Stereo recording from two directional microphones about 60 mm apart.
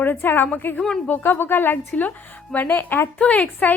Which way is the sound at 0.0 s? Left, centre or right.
Left.